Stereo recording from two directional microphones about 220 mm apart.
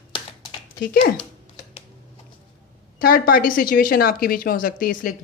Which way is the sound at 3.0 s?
40° left (ahead or behind).